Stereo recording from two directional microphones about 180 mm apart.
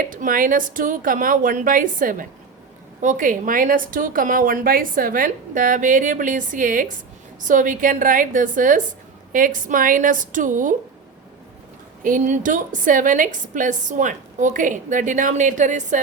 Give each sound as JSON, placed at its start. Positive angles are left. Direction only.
{"t": 0.0, "sound": "a woman's voice", "side_deg": -50}
{"t": 12.0, "sound": "a woman's voice", "side_deg": -45}